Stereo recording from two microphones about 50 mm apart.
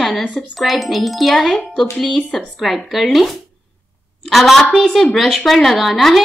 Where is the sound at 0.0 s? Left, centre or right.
Centre.